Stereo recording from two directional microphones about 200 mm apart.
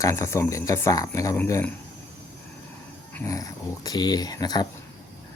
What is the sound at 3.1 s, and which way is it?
Speech, 15° left (ahead or behind).